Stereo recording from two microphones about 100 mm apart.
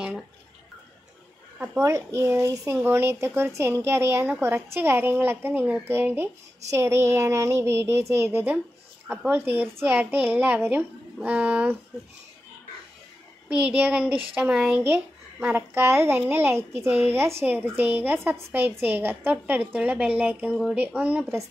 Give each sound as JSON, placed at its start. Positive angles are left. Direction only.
{"t": 1.8, "sound": "a child's voice", "side_deg": -30}
{"t": 13.5, "sound": "speech", "side_deg": -15}